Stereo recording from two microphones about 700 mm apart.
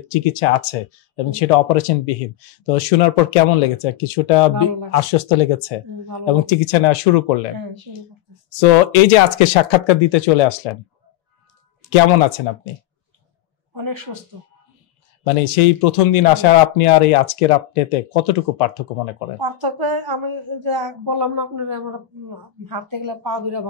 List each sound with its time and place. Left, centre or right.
0.1 s speech: left
8.5 s speech: left
9.7 s speech: left
11.9 s speech: left
15.2 s speech: left
19.4 s speech: right
22.9 s speech: right